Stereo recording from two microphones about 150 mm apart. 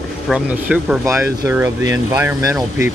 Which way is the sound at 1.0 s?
20° right (ahead or behind).